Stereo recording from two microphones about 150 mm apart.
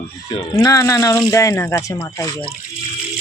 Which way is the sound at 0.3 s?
25° left (ahead or behind).